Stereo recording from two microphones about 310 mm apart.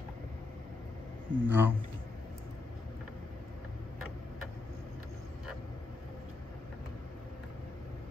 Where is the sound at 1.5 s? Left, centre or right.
Centre.